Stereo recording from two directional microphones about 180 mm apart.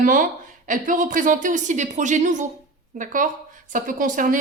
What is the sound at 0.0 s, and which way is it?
A woman's voice, 50° right (ahead or behind).